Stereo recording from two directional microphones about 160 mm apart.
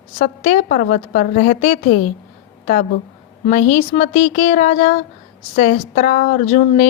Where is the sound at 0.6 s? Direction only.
60° left (ahead or behind).